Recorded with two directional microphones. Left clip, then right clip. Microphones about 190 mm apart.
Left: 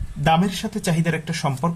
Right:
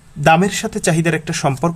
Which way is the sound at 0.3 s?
35° right (ahead or behind).